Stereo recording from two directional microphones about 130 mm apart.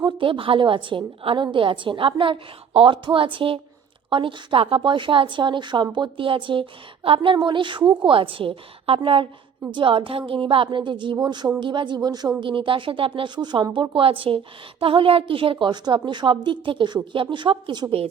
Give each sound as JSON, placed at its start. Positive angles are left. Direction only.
{"t": 0.0, "sound": "a woman's voice", "side_deg": -40}